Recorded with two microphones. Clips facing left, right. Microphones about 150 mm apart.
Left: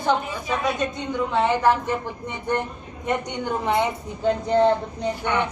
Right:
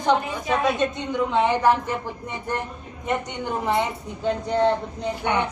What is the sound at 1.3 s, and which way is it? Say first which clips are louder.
Speech: even; 15° right (ahead or behind).